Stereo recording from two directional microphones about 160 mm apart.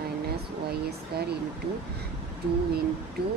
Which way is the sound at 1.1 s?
80° right.